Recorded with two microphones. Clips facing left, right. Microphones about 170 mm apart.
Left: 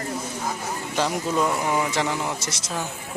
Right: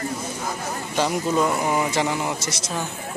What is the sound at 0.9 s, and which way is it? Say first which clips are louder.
A man's voice: right 2 dB; centre (ahead or behind).